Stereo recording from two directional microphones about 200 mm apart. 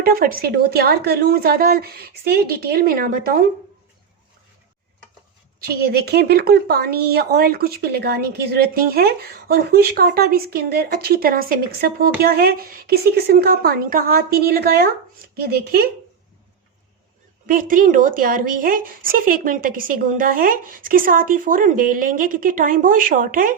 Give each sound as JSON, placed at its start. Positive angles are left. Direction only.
{"t": 0.0, "sound": "a woman's voice", "side_deg": -45}
{"t": 5.5, "sound": "a woman's voice", "side_deg": -50}
{"t": 17.4, "sound": "a woman's voice", "side_deg": -45}